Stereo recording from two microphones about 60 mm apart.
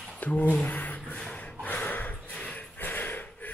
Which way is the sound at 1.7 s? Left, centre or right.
Left.